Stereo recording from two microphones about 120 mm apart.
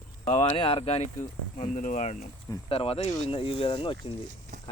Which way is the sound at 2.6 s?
55° left (ahead or behind).